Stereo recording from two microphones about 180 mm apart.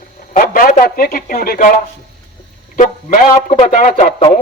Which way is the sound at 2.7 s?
45° left (ahead or behind).